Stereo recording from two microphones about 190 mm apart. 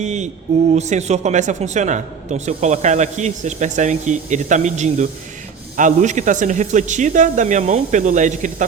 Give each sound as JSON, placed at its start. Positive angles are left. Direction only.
{"t": 0.0, "sound": "a man's voice", "side_deg": -40}